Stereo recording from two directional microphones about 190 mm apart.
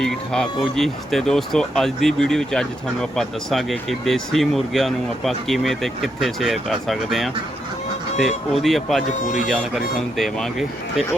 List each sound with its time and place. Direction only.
0.0 s speech: 5° left (ahead or behind)
8.6 s speech: centre (ahead or behind)